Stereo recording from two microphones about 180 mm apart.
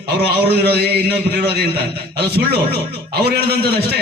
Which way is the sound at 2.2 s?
65° right (ahead or behind).